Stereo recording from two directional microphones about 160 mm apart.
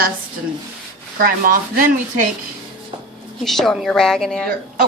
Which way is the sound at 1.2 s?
65° right (ahead or behind).